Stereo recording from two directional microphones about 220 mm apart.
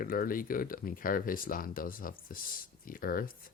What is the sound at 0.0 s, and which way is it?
Speech, 40° left (ahead or behind).